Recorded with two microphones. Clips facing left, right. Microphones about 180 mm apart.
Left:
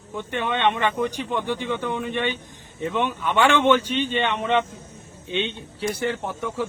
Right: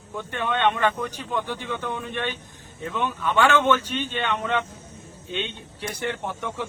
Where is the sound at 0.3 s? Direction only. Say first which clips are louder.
Left 1 dB; 5° left (ahead or behind).